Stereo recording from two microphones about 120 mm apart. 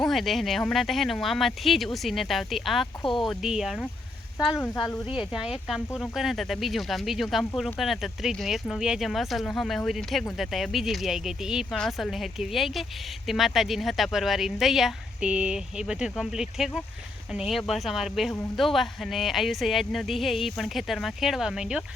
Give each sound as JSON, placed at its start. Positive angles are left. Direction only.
{"t": 0.0, "sound": "speech", "side_deg": 0}
{"t": 4.4, "sound": "speech", "side_deg": 30}
{"t": 5.3, "sound": "speech", "side_deg": -5}